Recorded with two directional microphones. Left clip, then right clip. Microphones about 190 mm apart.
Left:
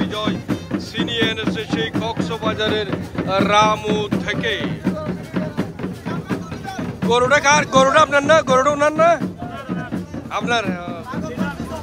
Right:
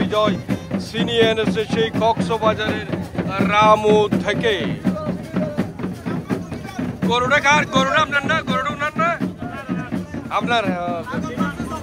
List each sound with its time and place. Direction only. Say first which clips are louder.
0.0 s speech: right 5 dB; centre (ahead or behind)
2.6 s speech: left 3 dB; 20° left (ahead or behind)
3.7 s speech: right 6 dB; centre (ahead or behind)
7.1 s speech: left 2 dB; 20° left (ahead or behind)
10.3 s speech: right 1 dB; 10° left (ahead or behind)